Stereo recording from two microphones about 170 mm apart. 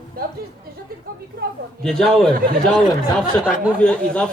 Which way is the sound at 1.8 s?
5° left (ahead or behind).